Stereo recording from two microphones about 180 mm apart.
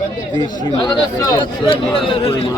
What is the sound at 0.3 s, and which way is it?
Speech, 25° left (ahead or behind).